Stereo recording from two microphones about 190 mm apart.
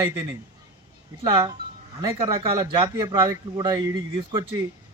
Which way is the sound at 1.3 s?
20° right (ahead or behind).